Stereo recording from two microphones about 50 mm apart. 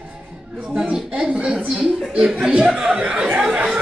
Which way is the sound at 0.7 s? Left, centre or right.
Centre.